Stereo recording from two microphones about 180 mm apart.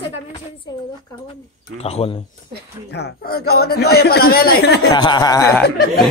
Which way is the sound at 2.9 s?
65° left (ahead or behind).